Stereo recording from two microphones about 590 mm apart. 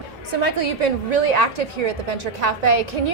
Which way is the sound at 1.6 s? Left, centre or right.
Right.